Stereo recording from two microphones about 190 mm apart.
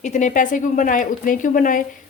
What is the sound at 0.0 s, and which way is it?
A woman's voice, 40° left (ahead or behind).